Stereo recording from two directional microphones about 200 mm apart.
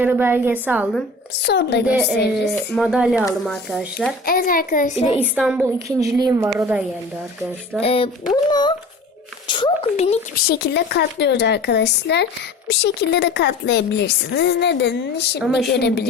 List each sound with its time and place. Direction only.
0.0 s a woman's voice: 10° right (ahead or behind)
1.5 s a child's voice: 55° left (ahead or behind)
1.9 s a woman's voice: 5° right (ahead or behind)
4.3 s a child's voice: 45° left (ahead or behind)
5.2 s a woman's voice: 5° right (ahead or behind)
7.8 s a child's voice: 30° left (ahead or behind)
10.5 s speech: 55° left (ahead or behind)